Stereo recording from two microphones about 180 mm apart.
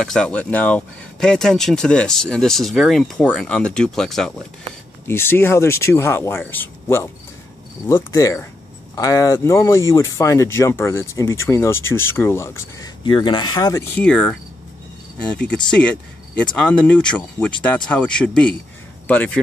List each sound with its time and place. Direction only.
0.0 s speech: 5° left (ahead or behind)
5.0 s speech: 15° left (ahead or behind)
13.0 s speech: 25° left (ahead or behind)
14.0 s speech: 5° left (ahead or behind)
15.4 s speech: 5° left (ahead or behind)